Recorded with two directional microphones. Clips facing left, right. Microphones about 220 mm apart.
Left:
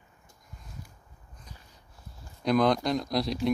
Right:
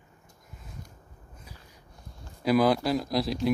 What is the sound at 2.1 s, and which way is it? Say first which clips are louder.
A man's voice: right 2 dB; 5° right (ahead or behind).